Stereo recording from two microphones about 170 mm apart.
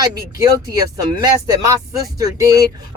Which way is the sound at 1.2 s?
20° right (ahead or behind).